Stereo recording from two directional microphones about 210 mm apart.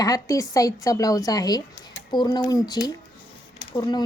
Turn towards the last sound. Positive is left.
turn(degrees=20)  # may be behind; listen again after turning